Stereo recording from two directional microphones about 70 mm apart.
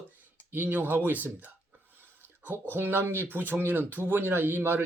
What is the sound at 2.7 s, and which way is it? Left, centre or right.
Speech, right.